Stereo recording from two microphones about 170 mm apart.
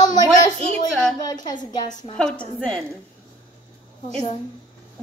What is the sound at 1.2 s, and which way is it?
Speech, 25° left (ahead or behind).